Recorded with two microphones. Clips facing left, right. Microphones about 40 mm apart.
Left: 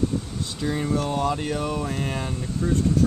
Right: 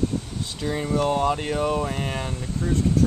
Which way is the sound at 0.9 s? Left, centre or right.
Centre.